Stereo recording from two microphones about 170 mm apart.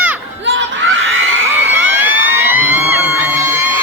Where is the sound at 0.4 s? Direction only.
90° right.